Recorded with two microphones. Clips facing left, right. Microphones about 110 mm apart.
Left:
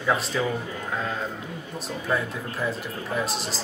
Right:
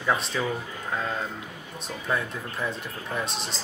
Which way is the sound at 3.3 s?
Centre (ahead or behind).